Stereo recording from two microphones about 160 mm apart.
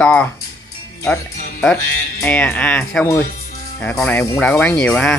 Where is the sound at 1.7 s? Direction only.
10° left (ahead or behind).